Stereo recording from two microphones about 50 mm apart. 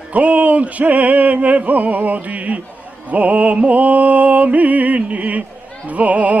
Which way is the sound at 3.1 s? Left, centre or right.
Right.